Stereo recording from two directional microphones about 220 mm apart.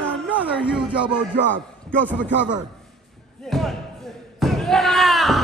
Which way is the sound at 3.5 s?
Centre (ahead or behind).